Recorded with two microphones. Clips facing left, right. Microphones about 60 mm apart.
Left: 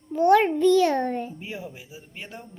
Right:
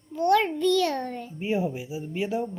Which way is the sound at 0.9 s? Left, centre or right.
Left.